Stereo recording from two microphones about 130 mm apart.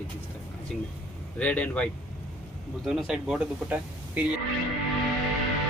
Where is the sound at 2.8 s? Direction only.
5° right (ahead or behind).